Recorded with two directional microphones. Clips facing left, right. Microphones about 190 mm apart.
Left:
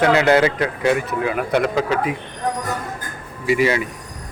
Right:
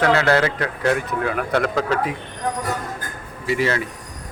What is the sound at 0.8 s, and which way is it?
A man's voice, 5° left (ahead or behind).